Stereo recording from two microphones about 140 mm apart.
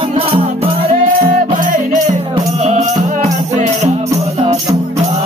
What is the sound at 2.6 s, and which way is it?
Music, 50° right (ahead or behind).